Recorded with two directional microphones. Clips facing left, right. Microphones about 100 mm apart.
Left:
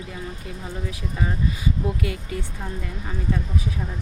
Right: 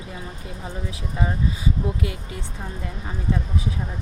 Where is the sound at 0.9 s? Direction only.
25° right (ahead or behind).